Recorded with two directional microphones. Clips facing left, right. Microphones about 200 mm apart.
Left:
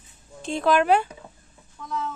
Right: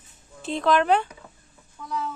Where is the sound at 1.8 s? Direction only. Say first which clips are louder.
Even; 5° right (ahead or behind).